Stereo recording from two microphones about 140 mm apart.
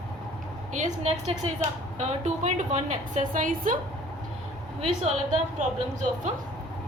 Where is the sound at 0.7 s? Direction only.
60° right (ahead or behind).